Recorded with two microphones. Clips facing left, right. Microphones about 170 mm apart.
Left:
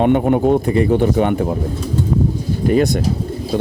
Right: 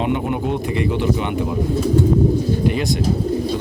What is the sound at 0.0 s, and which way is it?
Speech, 45° left (ahead or behind).